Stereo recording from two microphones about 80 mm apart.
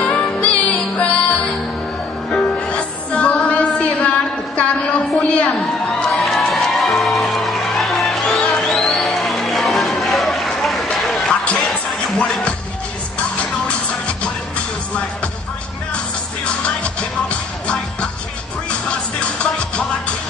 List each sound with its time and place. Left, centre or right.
0.0 s music: centre
3.4 s a sound: centre
5.5 s music: centre
16.8 s music: centre